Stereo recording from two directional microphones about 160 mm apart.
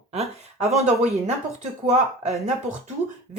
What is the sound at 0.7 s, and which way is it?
Speech, 45° right (ahead or behind).